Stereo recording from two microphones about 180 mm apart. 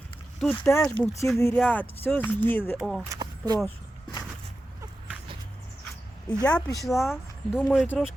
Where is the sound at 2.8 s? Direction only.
Centre (ahead or behind).